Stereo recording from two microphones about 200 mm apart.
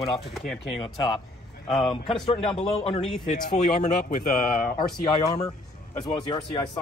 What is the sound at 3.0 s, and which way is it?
Speech, centre (ahead or behind).